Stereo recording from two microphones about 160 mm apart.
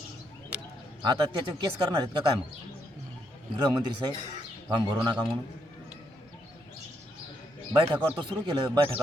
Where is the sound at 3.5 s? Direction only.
25° right (ahead or behind).